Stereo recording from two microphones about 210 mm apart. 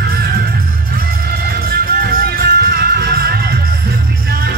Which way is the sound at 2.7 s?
50° right (ahead or behind).